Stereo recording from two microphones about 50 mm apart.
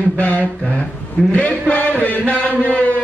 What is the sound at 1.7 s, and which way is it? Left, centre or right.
Chant, left.